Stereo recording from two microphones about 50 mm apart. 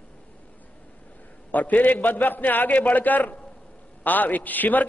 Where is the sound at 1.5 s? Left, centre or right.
Left.